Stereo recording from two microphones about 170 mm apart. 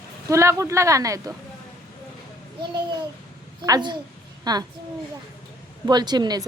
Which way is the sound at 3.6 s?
25° right (ahead or behind).